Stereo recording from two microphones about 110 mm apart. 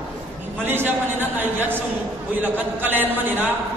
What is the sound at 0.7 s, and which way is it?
A man's voice, 20° right (ahead or behind).